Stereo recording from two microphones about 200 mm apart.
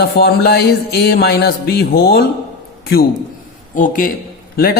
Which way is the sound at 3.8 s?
40° left (ahead or behind).